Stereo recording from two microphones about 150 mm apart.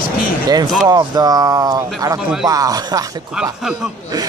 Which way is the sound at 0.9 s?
25° right (ahead or behind).